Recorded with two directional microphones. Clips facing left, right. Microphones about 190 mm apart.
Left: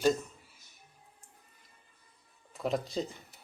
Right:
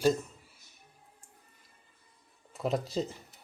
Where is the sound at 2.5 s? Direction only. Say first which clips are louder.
Right 1 dB; centre (ahead or behind).